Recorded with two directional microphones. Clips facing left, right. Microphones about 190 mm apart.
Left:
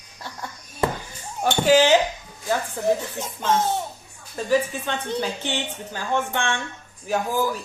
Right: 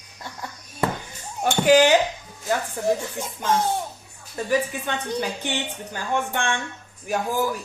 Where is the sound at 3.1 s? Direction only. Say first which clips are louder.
Left 1 dB; 10° right (ahead or behind).